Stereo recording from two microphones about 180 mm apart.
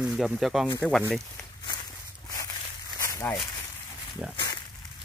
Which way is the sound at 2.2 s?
20° left (ahead or behind).